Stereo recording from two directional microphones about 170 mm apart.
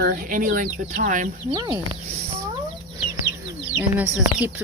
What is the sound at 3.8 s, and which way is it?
Speech, 10° right (ahead or behind).